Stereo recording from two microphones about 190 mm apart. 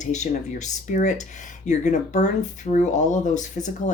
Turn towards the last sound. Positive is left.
turn(degrees=40)  # may be behind; listen again after turning